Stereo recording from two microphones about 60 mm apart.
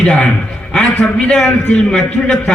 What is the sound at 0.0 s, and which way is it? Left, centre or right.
Speech, left.